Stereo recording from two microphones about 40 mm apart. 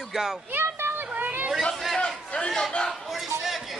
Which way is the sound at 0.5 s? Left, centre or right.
Right.